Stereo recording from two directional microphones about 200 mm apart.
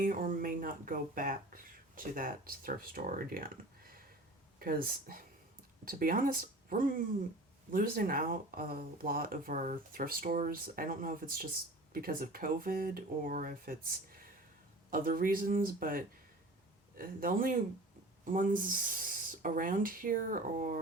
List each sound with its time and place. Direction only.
0.0 s speech: 45° right (ahead or behind)
4.6 s speech: 45° right (ahead or behind)
14.8 s speech: 45° right (ahead or behind)